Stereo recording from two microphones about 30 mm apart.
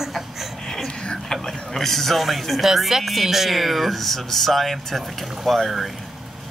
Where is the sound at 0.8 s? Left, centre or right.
Left.